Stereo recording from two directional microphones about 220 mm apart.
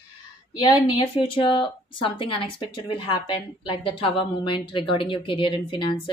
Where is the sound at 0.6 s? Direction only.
20° left (ahead or behind).